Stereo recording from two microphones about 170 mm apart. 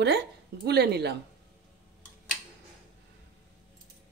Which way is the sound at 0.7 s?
75° right (ahead or behind).